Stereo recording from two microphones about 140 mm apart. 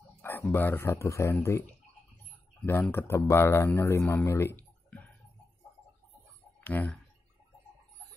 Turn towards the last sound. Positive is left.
turn(degrees=15)  # may be behind; listen again after turning